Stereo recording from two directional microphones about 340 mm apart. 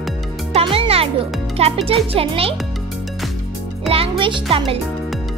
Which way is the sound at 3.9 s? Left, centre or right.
Centre.